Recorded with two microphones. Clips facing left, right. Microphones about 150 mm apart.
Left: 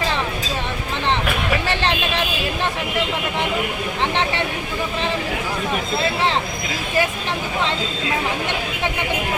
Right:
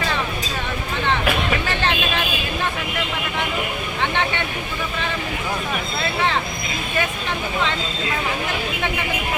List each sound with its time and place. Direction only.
1.7 s vehicle: 30° left (ahead or behind)